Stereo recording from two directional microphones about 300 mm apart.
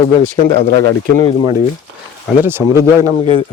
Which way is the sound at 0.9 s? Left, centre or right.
Centre.